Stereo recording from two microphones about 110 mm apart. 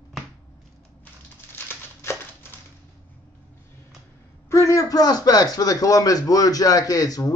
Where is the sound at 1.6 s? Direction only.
20° left (ahead or behind).